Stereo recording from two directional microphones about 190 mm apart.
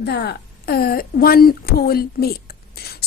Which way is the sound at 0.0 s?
60° left (ahead or behind).